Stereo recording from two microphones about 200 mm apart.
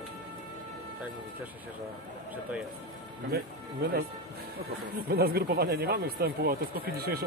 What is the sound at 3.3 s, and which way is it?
Speech, 50° right (ahead or behind).